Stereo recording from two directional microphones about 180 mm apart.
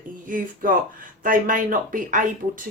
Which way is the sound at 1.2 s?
50° right (ahead or behind).